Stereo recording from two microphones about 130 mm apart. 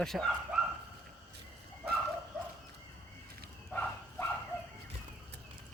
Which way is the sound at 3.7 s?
10° left (ahead or behind).